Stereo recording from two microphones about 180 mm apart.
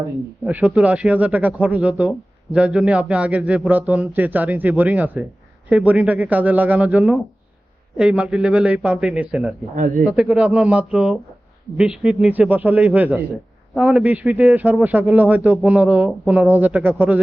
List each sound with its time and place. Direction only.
0.4 s speech: 5° right (ahead or behind)
9.7 s speech: 45° right (ahead or behind)
10.1 s speech: 5° right (ahead or behind)